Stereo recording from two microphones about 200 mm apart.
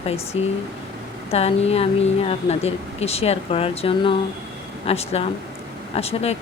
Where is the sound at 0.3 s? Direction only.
30° left (ahead or behind).